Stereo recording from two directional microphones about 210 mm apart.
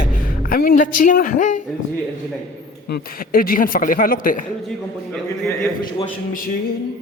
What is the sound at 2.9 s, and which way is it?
Speech, 45° left (ahead or behind).